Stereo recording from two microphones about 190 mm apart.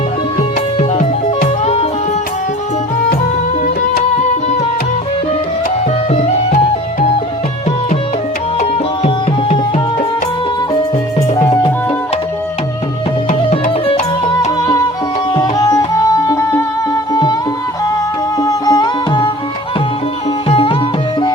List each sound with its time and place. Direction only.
0.8 s music: 40° left (ahead or behind)
6.1 s music: 35° left (ahead or behind)
9.0 s tabla: 35° left (ahead or behind)
11.3 s music: 20° left (ahead or behind)
13.5 s music: 30° left (ahead or behind)
15.4 s music: 20° left (ahead or behind)
18.3 s music: 20° left (ahead or behind)
20.5 s music: 30° left (ahead or behind)